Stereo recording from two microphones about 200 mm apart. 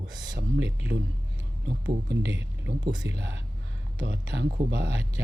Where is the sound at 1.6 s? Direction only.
60° right (ahead or behind).